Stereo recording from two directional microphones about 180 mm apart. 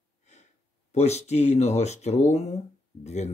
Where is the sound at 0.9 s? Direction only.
35° left (ahead or behind).